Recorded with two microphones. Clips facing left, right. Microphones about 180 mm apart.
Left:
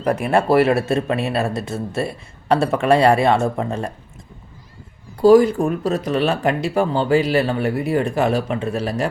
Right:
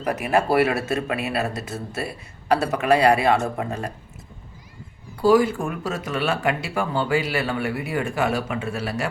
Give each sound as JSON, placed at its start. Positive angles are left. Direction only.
{"t": 0.0, "sound": "speech", "side_deg": 30}
{"t": 5.2, "sound": "speech", "side_deg": 40}